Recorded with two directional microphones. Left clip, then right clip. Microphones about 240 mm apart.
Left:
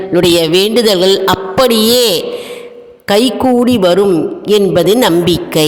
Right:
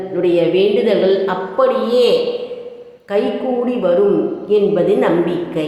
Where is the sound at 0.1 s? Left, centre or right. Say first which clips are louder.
Left 5 dB; left.